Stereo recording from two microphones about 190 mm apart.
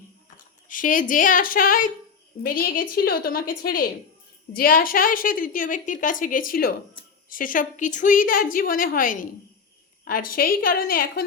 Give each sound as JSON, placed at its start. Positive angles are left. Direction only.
{"t": 0.7, "sound": "a woman's voice", "side_deg": 45}